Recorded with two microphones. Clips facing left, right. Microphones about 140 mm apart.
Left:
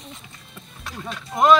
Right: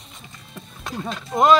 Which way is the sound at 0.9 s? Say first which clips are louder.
Right 4 dB; 35° right (ahead or behind).